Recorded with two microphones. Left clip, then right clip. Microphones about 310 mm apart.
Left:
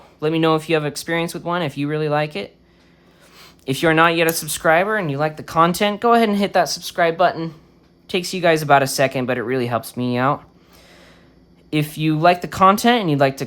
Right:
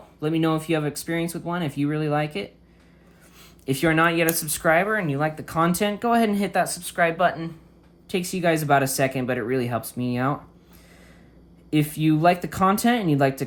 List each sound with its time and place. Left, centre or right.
0.2 s speech: centre
11.7 s speech: centre